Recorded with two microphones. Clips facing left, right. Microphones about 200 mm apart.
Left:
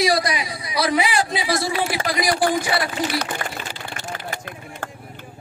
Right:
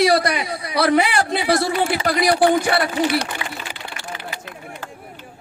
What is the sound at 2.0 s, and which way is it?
Speech, 60° right (ahead or behind).